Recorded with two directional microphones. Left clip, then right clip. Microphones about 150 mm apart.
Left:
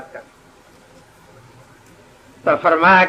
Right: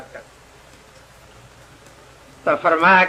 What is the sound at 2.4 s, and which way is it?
Speech, 30° right (ahead or behind).